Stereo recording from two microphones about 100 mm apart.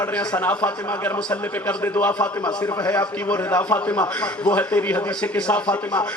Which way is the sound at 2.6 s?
40° left (ahead or behind).